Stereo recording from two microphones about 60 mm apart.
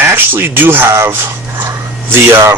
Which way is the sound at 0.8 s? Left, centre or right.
Right.